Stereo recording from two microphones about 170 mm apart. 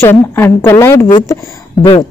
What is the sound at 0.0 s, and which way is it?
Speech, 15° left (ahead or behind).